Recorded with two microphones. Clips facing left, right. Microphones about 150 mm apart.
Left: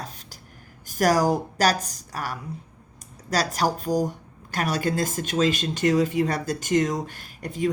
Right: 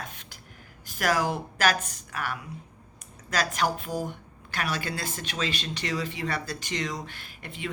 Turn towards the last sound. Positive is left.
turn(degrees=40)  # may be behind; listen again after turning